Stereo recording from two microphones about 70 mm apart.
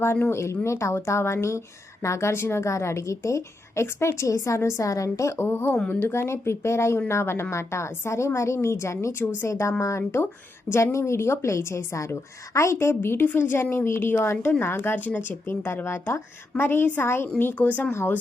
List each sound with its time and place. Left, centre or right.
0.3 s a woman's voice: left
12.7 s speech: left
15.6 s speech: left
17.5 s speech: left
17.9 s speech: left